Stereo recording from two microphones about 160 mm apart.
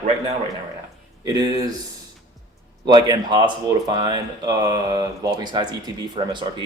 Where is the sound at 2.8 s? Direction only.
25° right (ahead or behind).